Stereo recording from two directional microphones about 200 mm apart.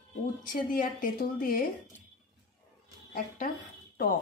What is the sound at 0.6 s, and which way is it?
A woman's voice, 45° left (ahead or behind).